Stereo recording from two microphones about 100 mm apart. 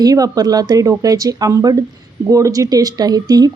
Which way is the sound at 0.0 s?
40° right (ahead or behind).